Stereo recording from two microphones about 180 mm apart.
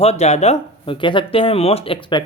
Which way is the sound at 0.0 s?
35° left (ahead or behind).